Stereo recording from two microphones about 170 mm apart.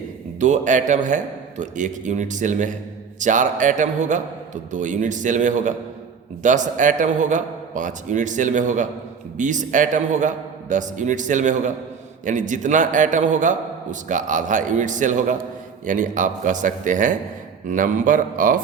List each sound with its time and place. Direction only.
0.3 s a man's voice: 45° right (ahead or behind)